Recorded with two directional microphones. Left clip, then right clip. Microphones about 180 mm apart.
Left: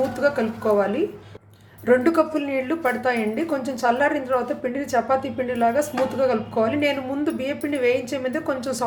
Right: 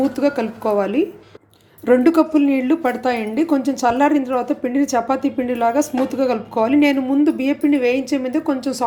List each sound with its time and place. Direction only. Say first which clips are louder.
0.2 s speech: right 2 dB; 35° right (ahead or behind)